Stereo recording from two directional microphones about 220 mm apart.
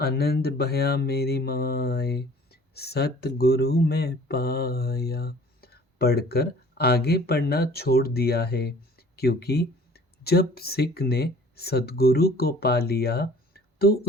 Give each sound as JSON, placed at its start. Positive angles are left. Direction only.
{"t": 0.0, "sound": "mantra", "side_deg": 45}